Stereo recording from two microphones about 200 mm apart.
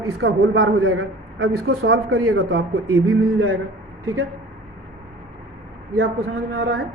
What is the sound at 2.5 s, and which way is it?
Speech, 75° right (ahead or behind).